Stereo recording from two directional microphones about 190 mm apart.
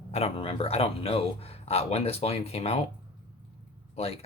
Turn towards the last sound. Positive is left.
turn(degrees=30)  # may be behind; listen again after turning